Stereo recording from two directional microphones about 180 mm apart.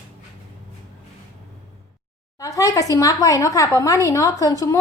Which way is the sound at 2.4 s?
20° left (ahead or behind).